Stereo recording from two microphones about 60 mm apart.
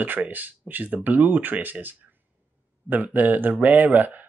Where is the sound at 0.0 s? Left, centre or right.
Right.